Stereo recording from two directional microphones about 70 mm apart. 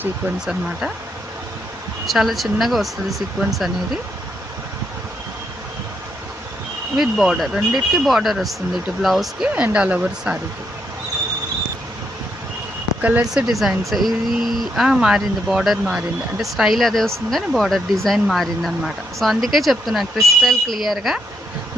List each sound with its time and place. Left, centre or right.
0.3 s speech: centre
2.0 s speech: centre
6.9 s speech: centre
9.7 s speech: centre
13.0 s speech: right
13.3 s speech: centre